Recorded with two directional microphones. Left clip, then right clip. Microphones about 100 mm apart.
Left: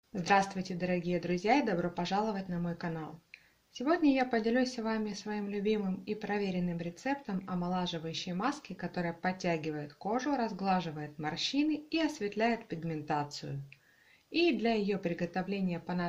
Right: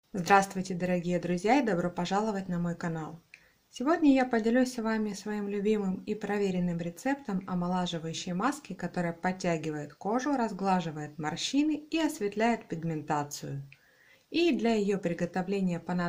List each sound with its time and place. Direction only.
0.1 s speech: 35° right (ahead or behind)